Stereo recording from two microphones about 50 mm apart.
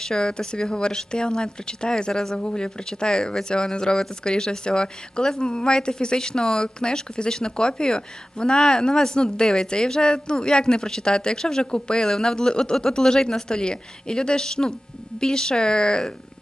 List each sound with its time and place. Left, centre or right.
0.0 s speech: centre